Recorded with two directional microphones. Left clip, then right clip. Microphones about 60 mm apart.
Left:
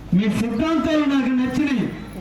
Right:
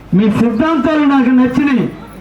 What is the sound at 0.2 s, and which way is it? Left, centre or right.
A man's voice, right.